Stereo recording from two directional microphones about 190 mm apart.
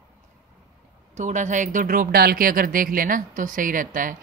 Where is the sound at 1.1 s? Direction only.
40° right (ahead or behind).